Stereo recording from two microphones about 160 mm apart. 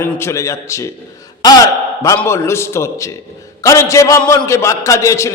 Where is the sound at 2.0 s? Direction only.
15° left (ahead or behind).